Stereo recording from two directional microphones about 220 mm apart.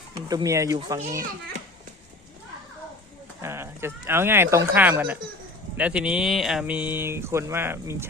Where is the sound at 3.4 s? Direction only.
10° right (ahead or behind).